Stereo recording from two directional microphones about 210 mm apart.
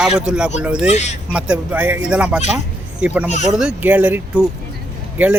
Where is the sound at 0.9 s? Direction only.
35° left (ahead or behind).